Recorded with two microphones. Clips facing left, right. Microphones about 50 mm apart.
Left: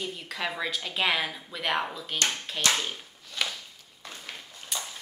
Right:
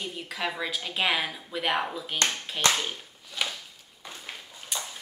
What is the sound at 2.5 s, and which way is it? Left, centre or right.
Speech, right.